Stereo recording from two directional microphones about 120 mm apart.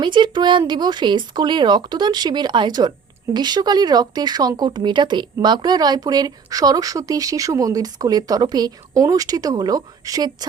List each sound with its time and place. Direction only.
0.0 s speech: 40° right (ahead or behind)